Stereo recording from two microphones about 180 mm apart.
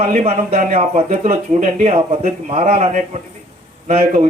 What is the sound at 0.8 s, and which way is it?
Speech, 35° right (ahead or behind).